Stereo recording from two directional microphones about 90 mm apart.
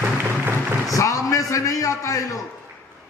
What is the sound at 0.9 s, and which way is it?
A man's voice, 35° left (ahead or behind).